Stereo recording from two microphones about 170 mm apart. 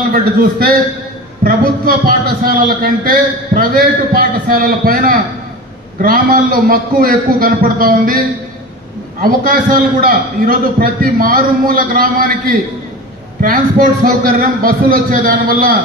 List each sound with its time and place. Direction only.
0.1 s a man's voice: 60° right (ahead or behind)
9.2 s a man's voice: 55° right (ahead or behind)